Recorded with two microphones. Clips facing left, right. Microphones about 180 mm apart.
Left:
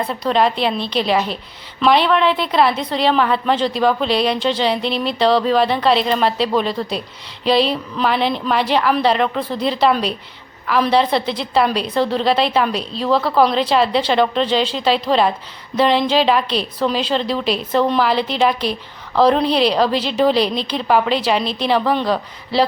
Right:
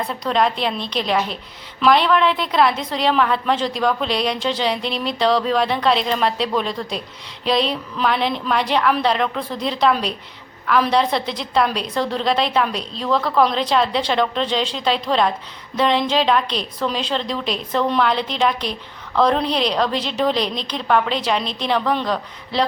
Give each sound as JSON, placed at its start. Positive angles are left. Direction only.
{"t": 0.0, "sound": "a woman's voice", "side_deg": 0}
{"t": 13.1, "sound": "a woman's voice", "side_deg": 30}
{"t": 13.3, "sound": "a woman's voice", "side_deg": 5}